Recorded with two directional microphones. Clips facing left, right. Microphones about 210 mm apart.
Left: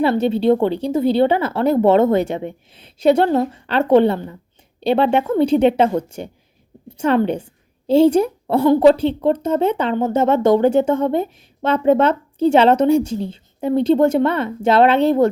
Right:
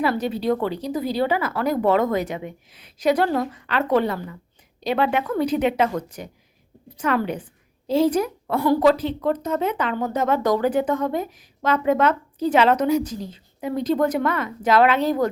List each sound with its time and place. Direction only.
0.0 s a woman's voice: 25° left (ahead or behind)